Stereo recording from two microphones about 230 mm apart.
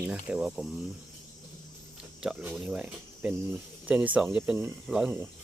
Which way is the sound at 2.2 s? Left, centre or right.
Centre.